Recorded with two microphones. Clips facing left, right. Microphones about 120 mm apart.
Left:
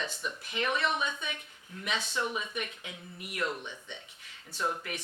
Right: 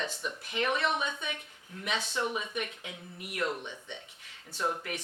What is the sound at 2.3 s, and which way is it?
Speech, 50° right (ahead or behind).